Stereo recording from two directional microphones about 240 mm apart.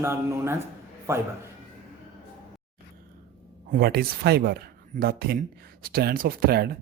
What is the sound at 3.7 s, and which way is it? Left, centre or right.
Speech, right.